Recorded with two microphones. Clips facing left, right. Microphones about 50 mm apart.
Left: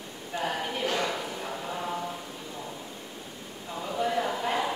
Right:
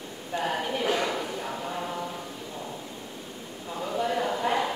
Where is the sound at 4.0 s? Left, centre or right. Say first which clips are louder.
Right 1 dB; centre.